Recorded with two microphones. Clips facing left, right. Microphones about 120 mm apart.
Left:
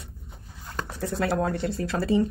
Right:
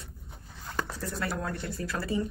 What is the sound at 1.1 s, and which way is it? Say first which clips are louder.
Speech: left 9 dB; 65° left (ahead or behind).